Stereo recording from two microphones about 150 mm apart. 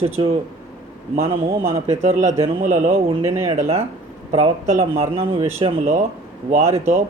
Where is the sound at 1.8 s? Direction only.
50° right (ahead or behind).